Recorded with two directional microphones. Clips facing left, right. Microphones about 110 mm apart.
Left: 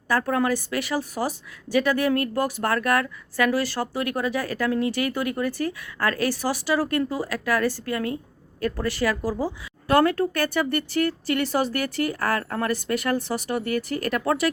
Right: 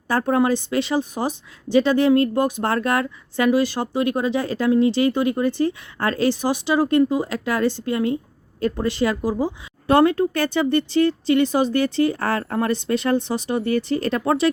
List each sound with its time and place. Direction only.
0.1 s a woman's voice: 25° right (ahead or behind)